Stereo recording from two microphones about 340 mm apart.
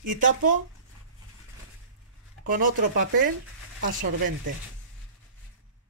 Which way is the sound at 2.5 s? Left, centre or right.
Right.